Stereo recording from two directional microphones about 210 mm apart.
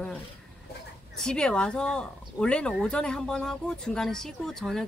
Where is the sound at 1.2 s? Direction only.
5° left (ahead or behind).